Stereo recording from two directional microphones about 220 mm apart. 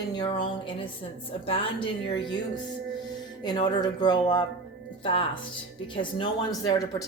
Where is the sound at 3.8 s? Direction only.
20° left (ahead or behind).